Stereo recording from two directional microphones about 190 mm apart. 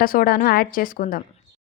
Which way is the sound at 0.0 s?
50° left (ahead or behind).